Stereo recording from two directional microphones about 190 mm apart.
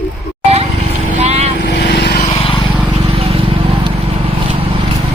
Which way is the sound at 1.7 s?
60° left (ahead or behind).